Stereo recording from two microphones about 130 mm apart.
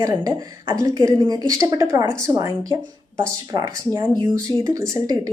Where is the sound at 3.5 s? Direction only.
30° right (ahead or behind).